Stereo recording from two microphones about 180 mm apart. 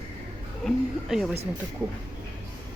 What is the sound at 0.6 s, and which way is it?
Speech, centre (ahead or behind).